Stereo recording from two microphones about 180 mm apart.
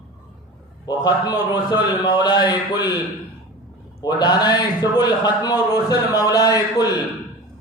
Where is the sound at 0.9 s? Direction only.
20° left (ahead or behind).